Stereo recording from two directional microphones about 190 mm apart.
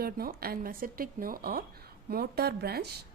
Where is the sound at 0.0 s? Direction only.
55° right (ahead or behind).